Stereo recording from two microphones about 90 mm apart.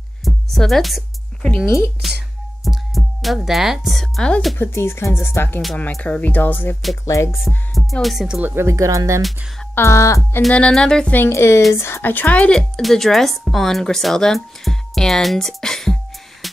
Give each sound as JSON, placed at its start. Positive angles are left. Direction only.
{"t": 0.2, "sound": "music", "side_deg": 0}
{"t": 1.6, "sound": "a woman's voice", "side_deg": -5}
{"t": 4.6, "sound": "speech", "side_deg": 25}
{"t": 5.9, "sound": "speech", "side_deg": 15}
{"t": 7.1, "sound": "speech", "side_deg": 35}
{"t": 7.4, "sound": "a woman's voice", "side_deg": 0}
{"t": 8.3, "sound": "speech", "side_deg": -20}
{"t": 9.8, "sound": "speech", "side_deg": 35}
{"t": 10.5, "sound": "speech", "side_deg": 10}
{"t": 11.1, "sound": "a woman's voice", "side_deg": 30}